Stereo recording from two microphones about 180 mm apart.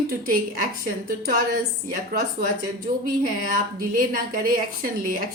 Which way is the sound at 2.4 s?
50° right (ahead or behind).